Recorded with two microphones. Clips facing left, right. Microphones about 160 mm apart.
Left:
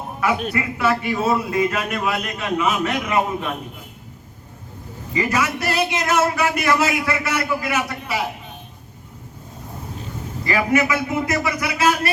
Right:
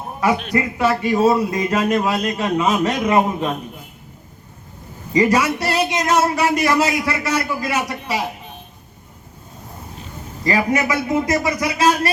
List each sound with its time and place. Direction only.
0.5 s a man's voice: 35° right (ahead or behind)
5.1 s a man's voice: 35° right (ahead or behind)
10.4 s a man's voice: 35° right (ahead or behind)